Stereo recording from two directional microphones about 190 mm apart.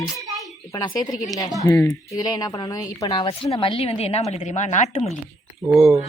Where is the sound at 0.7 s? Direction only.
20° left (ahead or behind); by 5.0 s 35° left (ahead or behind).